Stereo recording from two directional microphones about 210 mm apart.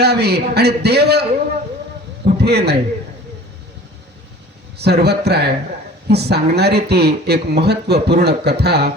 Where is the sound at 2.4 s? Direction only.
50° right (ahead or behind).